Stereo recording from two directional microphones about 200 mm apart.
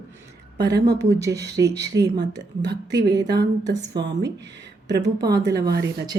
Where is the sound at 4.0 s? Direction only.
60° right (ahead or behind).